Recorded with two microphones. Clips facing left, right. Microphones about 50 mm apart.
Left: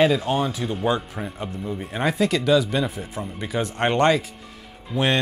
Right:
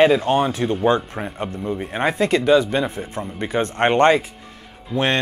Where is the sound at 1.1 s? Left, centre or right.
Right.